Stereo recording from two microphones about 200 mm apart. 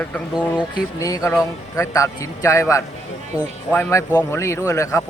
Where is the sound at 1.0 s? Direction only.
15° left (ahead or behind).